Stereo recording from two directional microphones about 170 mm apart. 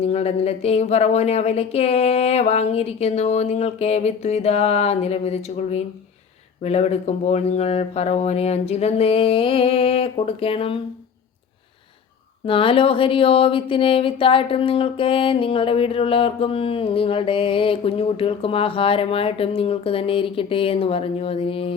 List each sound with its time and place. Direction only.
0.0 s speech: 40° left (ahead or behind)
12.5 s speech: 30° left (ahead or behind)